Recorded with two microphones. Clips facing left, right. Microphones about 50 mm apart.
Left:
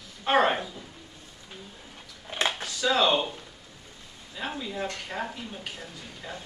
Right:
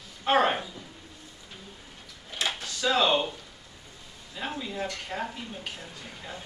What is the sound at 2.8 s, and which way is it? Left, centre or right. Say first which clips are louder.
Speech: left 1 dB; centre.